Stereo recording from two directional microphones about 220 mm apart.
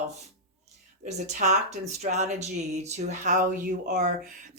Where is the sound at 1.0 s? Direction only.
30° right (ahead or behind).